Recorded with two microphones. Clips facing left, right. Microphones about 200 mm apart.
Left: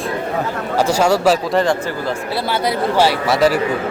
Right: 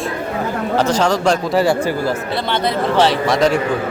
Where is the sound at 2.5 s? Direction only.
10° left (ahead or behind).